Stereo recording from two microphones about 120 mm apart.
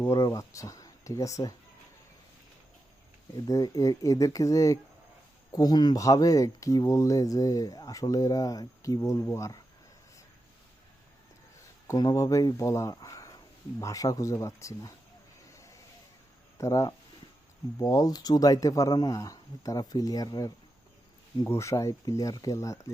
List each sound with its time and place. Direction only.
0.0 s speech: 25° left (ahead or behind)
3.3 s speech: 30° left (ahead or behind)
11.9 s speech: 30° left (ahead or behind)
16.6 s speech: 30° left (ahead or behind)